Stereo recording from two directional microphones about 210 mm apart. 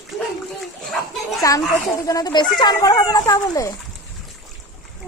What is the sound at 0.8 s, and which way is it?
Speech, centre (ahead or behind).